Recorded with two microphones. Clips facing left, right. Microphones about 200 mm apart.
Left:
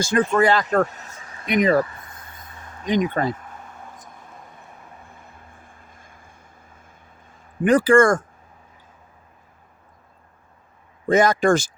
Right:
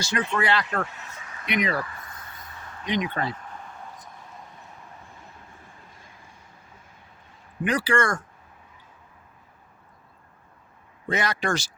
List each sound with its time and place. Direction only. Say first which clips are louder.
0.0 s speech: left 8 dB; 50° left (ahead or behind); by 1.5 s 30° left (ahead or behind)
1.5 s speech: left 8 dB; 45° left (ahead or behind)
2.8 s speech: left 6 dB; 45° left (ahead or behind)
3.9 s vehicle: left 1 dB; 50° left (ahead or behind)
7.6 s speech: left 9 dB; 50° left (ahead or behind)
11.1 s speech: left 10 dB; 45° left (ahead or behind)